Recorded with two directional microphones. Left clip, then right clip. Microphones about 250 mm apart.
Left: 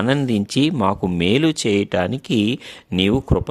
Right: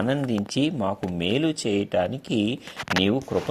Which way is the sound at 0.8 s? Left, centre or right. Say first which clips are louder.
Left 7 dB; left.